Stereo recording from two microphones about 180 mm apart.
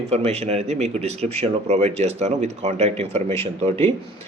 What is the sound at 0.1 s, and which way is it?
A man's voice, 35° right (ahead or behind).